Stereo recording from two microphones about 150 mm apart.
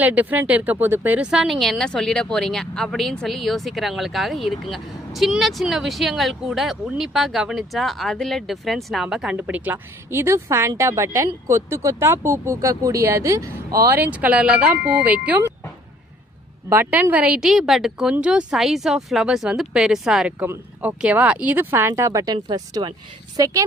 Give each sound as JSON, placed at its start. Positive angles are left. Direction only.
{"t": 0.0, "sound": "a woman's voice", "side_deg": -10}
{"t": 16.6, "sound": "a woman's voice", "side_deg": -15}